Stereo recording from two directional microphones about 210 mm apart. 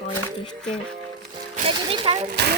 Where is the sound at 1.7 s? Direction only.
25° right (ahead or behind).